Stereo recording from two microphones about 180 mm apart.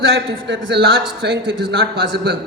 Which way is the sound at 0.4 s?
80° right.